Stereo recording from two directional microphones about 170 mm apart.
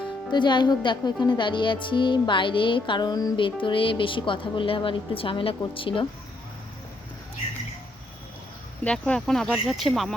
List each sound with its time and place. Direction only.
0.3 s speech: 25° left (ahead or behind)
8.8 s speech: 5° left (ahead or behind)